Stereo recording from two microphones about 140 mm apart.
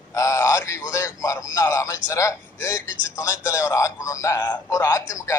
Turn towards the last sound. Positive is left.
turn(degrees=20)  # may be behind; listen again after turning